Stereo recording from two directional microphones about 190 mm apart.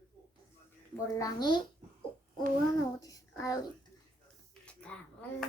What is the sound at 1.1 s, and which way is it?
Speech, 20° left (ahead or behind).